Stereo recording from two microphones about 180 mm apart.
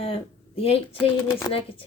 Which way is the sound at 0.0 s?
30° left (ahead or behind).